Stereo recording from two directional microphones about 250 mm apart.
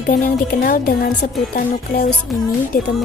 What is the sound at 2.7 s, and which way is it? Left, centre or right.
Speech, left.